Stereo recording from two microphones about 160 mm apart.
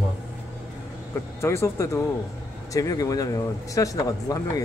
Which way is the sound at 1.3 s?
15° left (ahead or behind).